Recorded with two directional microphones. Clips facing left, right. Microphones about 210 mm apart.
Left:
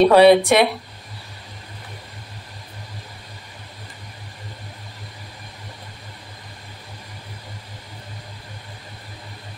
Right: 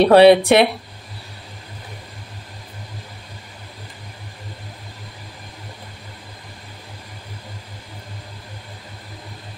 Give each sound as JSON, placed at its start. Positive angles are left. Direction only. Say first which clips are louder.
{"t": 0.0, "sound": "speech", "louder": "right 2 dB", "side_deg": -30}